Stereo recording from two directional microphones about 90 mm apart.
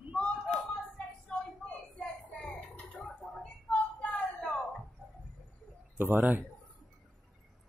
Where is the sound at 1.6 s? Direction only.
10° left (ahead or behind).